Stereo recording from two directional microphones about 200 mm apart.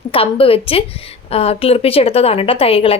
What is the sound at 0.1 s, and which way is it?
A woman's voice, 25° left (ahead or behind).